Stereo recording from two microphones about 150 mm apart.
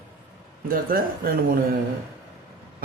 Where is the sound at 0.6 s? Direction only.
75° right (ahead or behind).